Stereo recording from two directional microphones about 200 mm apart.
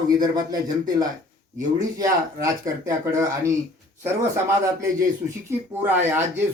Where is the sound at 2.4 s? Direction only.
15° right (ahead or behind).